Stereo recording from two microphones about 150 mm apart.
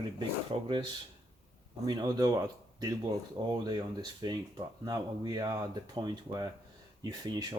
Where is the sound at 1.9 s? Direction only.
25° right (ahead or behind).